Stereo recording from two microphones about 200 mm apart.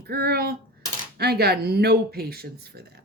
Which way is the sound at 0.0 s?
50° right (ahead or behind).